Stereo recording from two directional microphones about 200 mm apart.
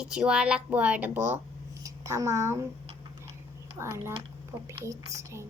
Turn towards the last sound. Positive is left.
turn(degrees=-15)  # may be behind; listen again after turning